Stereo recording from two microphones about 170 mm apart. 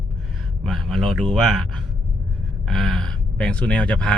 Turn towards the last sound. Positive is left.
turn(degrees=5)  # may be behind; listen again after turning